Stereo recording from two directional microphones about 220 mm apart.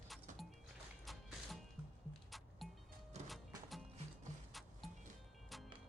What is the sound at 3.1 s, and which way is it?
Music, 30° right (ahead or behind).